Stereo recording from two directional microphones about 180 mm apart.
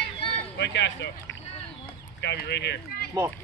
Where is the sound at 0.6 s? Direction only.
75° left (ahead or behind).